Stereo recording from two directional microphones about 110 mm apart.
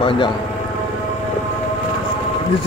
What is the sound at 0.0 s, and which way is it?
Speech, 50° left (ahead or behind).